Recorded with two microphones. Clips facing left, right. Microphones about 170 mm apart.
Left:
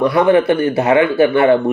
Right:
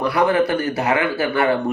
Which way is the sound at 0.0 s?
25° left (ahead or behind).